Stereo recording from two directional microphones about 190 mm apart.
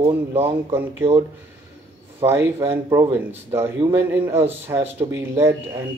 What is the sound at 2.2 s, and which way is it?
A man's voice, 10° right (ahead or behind).